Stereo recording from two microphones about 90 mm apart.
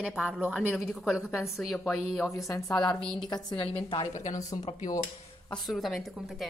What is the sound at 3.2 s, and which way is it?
Speech, 60° left (ahead or behind).